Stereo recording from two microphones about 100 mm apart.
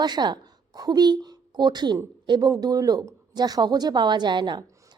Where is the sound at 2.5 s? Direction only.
40° right (ahead or behind).